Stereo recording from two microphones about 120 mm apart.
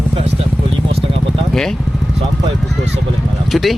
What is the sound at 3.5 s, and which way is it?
Speech, centre (ahead or behind).